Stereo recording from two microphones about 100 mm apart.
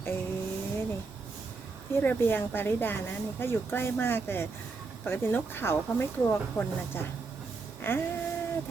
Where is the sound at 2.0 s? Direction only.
20° left (ahead or behind).